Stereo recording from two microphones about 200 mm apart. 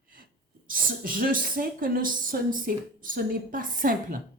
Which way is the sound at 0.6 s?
45° right (ahead or behind).